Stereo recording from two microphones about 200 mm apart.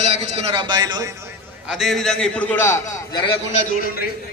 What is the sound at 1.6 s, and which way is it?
A man's voice, centre (ahead or behind).